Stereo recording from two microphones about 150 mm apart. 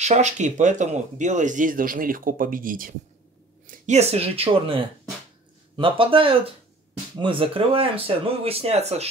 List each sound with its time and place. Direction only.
0.0 s speech: 50° right (ahead or behind); by 2.9 s 65° right (ahead or behind)
3.6 s speech: 50° right (ahead or behind)